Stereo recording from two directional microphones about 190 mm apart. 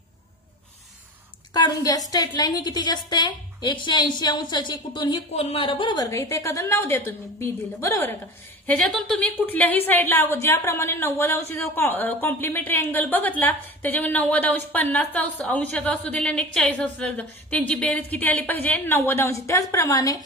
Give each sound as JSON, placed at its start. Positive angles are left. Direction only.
{"t": 1.5, "sound": "a woman's voice", "side_deg": 20}